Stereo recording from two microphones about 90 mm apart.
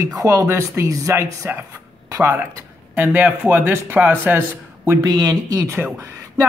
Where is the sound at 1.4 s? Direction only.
25° right (ahead or behind).